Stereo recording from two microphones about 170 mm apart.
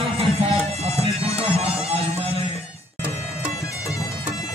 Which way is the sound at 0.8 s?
35° right (ahead or behind).